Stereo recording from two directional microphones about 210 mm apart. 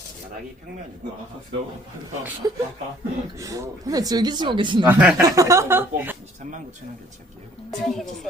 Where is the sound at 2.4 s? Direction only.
20° right (ahead or behind).